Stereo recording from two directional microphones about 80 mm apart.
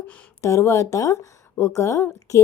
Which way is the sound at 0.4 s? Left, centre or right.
Left.